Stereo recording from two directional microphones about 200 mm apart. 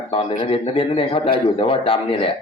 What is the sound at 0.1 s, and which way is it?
Speech, 25° left (ahead or behind).